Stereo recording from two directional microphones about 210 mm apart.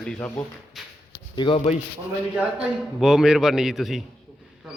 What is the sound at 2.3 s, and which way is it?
A man's voice, 5° right (ahead or behind).